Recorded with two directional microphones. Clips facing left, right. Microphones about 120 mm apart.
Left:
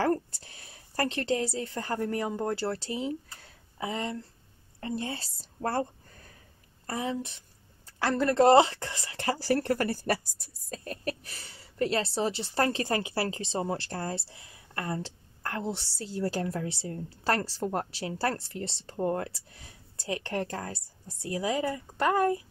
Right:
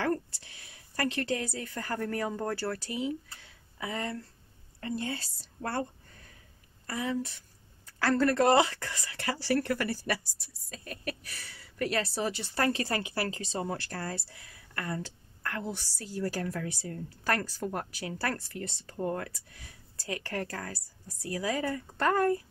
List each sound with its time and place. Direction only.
0.0 s a woman's voice: 35° left (ahead or behind)
3.8 s a woman's voice: 20° left (ahead or behind)
6.9 s speech: 25° left (ahead or behind)